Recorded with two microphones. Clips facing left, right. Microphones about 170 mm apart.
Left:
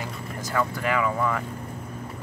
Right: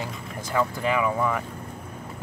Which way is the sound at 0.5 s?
15° right (ahead or behind).